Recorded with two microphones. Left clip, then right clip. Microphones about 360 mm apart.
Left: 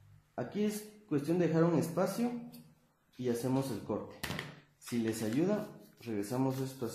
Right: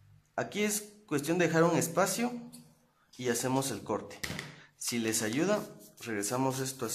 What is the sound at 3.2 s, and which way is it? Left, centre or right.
Speech, right.